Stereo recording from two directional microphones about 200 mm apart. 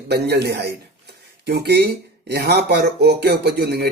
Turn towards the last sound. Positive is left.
turn(degrees=-55)  # may be behind; listen again after turning